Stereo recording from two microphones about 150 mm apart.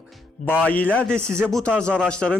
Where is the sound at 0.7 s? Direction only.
10° left (ahead or behind).